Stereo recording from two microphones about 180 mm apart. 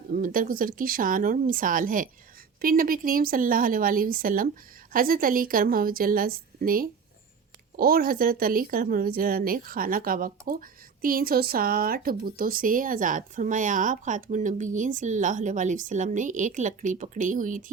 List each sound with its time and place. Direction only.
0.1 s speech: 50° right (ahead or behind)